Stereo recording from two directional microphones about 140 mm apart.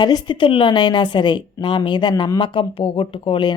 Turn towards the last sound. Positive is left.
turn(degrees=35)  # may be behind; listen again after turning